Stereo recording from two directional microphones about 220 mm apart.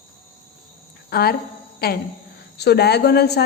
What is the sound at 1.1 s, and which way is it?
A woman's voice, 45° left (ahead or behind).